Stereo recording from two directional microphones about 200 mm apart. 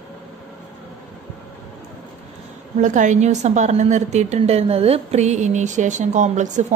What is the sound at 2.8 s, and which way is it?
A woman's voice, 40° right (ahead or behind).